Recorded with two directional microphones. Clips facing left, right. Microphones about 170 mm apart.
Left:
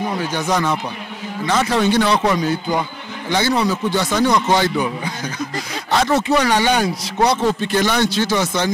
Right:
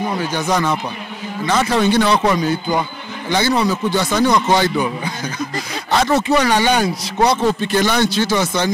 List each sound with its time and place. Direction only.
0.0 s speech: 15° right (ahead or behind)
0.5 s a man's voice: 25° right (ahead or behind)
1.5 s speech: 10° right (ahead or behind)